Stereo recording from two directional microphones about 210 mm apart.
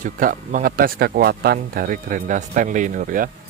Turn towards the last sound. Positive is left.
turn(degrees=-40)  # may be behind; listen again after turning